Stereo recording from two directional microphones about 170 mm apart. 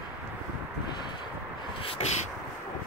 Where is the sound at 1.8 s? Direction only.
35° left (ahead or behind).